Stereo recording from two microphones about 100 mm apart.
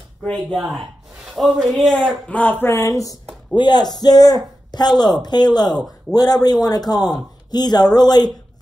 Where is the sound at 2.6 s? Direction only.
30° left (ahead or behind).